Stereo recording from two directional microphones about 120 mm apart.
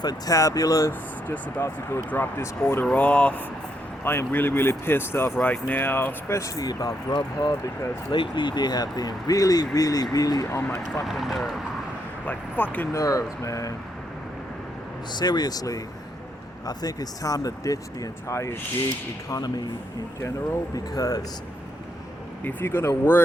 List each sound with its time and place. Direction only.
0.0 s speech: 30° left (ahead or behind)
8.1 s speech: 40° left (ahead or behind)
11.0 s speech: centre (ahead or behind)
12.2 s speech: 15° left (ahead or behind)
12.9 s speech: 25° left (ahead or behind)
15.1 s speech: 35° left (ahead or behind)
22.4 s speech: 20° left (ahead or behind)